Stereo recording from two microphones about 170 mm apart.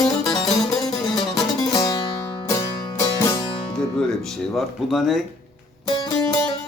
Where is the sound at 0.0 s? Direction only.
Centre (ahead or behind).